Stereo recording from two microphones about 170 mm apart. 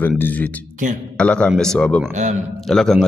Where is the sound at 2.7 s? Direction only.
Centre (ahead or behind).